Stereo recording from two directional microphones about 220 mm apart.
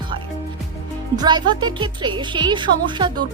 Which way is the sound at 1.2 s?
20° right (ahead or behind).